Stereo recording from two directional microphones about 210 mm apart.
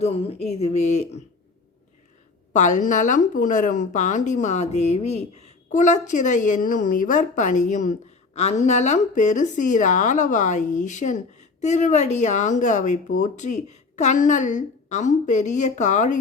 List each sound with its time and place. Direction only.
0.0 s speech: 30° left (ahead or behind)
2.5 s speech: 35° left (ahead or behind)